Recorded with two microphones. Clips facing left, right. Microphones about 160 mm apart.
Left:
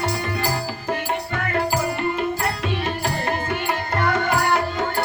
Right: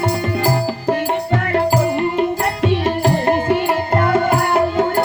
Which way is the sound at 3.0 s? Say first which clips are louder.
Right 11 dB; 45° right (ahead or behind).